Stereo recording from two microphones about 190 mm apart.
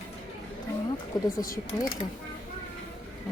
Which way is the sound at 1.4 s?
45° left (ahead or behind).